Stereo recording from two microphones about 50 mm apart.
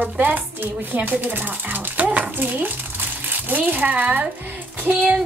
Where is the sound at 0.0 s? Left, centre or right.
Right.